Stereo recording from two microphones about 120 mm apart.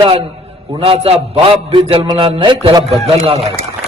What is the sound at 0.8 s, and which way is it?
Speech, 55° right (ahead or behind).